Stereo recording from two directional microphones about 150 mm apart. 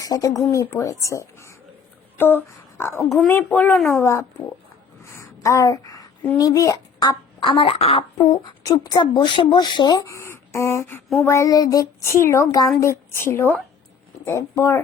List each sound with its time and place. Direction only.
0.0 s speech: 25° left (ahead or behind)
3.0 s speech: centre (ahead or behind)
3.2 s speech: 10° left (ahead or behind)
5.1 s a sound: 20° left (ahead or behind)
6.3 s speech: 20° left (ahead or behind); by 8.4 s 40° left (ahead or behind)
8.6 s speech: 25° left (ahead or behind)